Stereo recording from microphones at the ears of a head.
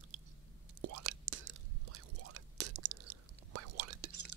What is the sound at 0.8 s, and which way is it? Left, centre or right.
Whispering, right.